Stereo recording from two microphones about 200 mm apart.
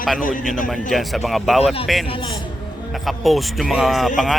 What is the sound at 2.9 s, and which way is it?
Speech, centre (ahead or behind).